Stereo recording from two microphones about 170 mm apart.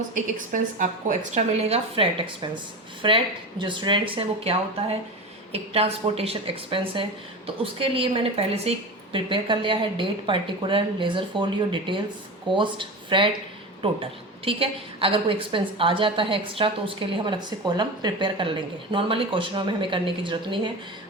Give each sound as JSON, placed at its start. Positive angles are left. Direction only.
{"t": 0.1, "sound": "a woman's voice", "side_deg": -50}